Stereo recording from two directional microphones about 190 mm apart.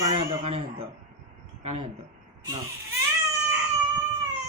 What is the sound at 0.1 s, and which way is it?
Speech, 30° right (ahead or behind).